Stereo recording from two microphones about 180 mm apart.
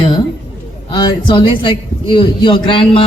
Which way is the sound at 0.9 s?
25° left (ahead or behind).